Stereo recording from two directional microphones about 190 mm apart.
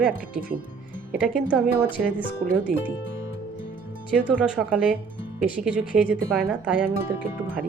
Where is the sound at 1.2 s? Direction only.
5° right (ahead or behind).